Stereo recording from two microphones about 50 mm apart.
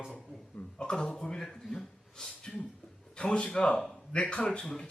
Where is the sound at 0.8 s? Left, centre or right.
Centre.